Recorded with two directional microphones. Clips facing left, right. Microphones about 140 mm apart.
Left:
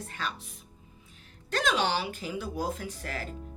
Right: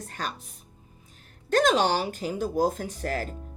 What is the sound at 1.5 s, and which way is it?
Speech, 45° right (ahead or behind).